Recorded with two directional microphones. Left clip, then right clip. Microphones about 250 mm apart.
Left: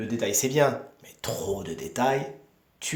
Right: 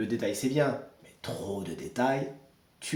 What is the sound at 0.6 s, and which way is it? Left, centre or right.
Speech, left.